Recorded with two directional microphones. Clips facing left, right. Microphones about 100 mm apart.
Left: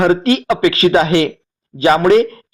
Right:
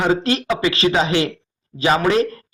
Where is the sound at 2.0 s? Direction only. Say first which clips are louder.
Left 8 dB; 35° left (ahead or behind).